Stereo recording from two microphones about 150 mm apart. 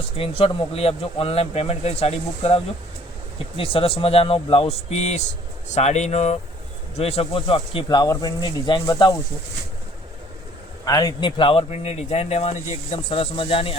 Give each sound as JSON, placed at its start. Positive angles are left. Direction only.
{"t": 0.2, "sound": "speech", "side_deg": 40}
{"t": 3.6, "sound": "a man's voice", "side_deg": 40}
{"t": 10.8, "sound": "a man's voice", "side_deg": 25}
{"t": 13.1, "sound": "speech", "side_deg": 35}